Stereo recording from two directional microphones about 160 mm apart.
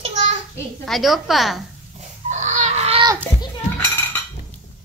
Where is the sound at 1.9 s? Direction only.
45° right (ahead or behind).